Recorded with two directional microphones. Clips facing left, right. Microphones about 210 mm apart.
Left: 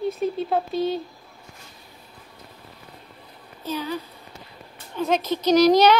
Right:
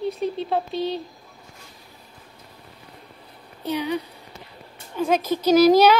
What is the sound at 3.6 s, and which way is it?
Speech, 15° right (ahead or behind).